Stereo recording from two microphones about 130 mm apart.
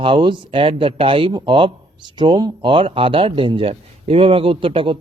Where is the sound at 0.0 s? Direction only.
40° right (ahead or behind).